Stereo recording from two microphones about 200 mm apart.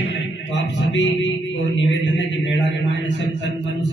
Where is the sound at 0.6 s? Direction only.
60° left (ahead or behind).